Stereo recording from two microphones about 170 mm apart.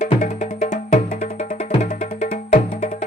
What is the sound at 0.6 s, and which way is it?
Music, 50° left (ahead or behind).